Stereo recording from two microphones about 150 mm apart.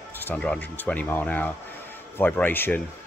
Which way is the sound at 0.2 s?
10° left (ahead or behind).